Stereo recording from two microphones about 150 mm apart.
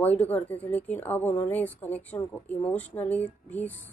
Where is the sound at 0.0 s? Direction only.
10° left (ahead or behind).